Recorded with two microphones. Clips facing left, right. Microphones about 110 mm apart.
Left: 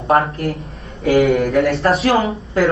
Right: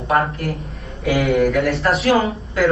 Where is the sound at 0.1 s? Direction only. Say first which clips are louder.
Left 3 dB; 30° left (ahead or behind).